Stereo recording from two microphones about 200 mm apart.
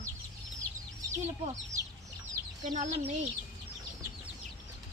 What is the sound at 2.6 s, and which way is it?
Speech, 40° right (ahead or behind).